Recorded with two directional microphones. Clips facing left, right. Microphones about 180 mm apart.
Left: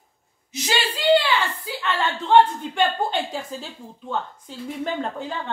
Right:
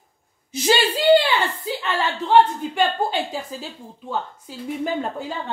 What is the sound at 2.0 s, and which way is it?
A woman's voice, 5° right (ahead or behind).